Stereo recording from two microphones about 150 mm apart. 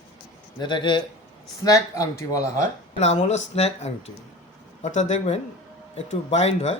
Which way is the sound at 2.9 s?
50° left (ahead or behind).